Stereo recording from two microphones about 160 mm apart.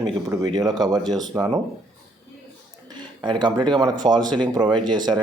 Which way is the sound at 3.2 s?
30° right (ahead or behind).